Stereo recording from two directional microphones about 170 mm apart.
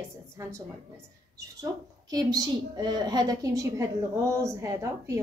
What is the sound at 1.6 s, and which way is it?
A woman's voice, 20° right (ahead or behind).